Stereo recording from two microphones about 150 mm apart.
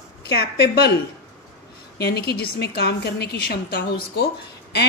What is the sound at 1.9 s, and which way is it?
A woman's voice, 90° left.